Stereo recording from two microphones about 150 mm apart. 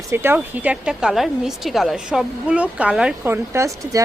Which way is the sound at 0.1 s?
15° right (ahead or behind).